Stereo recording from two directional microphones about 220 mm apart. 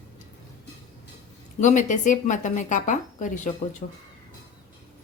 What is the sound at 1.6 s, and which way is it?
Speech, 35° left (ahead or behind).